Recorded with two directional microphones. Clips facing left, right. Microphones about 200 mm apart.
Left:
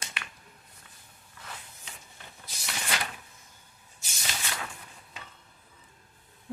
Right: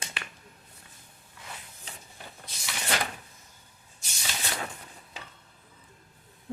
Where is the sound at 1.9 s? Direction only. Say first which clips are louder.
Right 3 dB; 35° right (ahead or behind).